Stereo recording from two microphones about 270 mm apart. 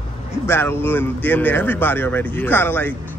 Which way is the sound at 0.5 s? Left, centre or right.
Centre.